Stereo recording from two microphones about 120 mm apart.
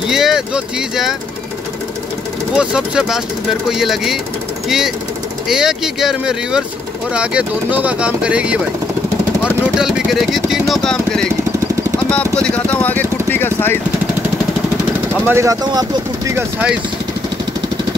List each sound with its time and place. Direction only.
0.1 s speech: 5° right (ahead or behind)
2.5 s speech: 5° right (ahead or behind)
9.8 s speech: 5° right (ahead or behind); by 13.7 s 15° left (ahead or behind)
15.2 s speech: 20° right (ahead or behind)
15.6 s speech: 35° right (ahead or behind)